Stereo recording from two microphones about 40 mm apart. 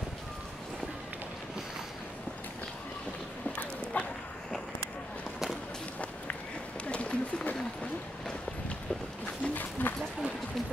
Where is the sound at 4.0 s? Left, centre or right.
Left.